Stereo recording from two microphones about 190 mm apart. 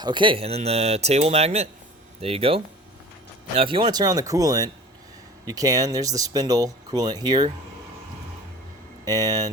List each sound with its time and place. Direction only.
0.0 s speech: 25° right (ahead or behind)
3.6 s speech: 25° right (ahead or behind)
9.0 s speech: 20° right (ahead or behind)